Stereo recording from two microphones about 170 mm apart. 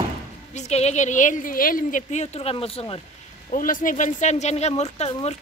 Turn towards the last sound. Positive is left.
turn(degrees=35)  # may be behind; listen again after turning